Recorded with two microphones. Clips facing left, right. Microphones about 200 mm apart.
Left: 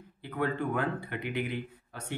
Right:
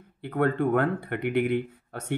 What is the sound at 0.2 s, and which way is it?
Speech, 60° right (ahead or behind).